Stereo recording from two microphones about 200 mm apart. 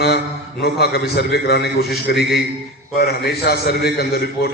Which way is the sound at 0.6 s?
55° left (ahead or behind).